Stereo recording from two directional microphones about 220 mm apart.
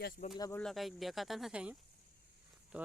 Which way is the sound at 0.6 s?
Centre (ahead or behind).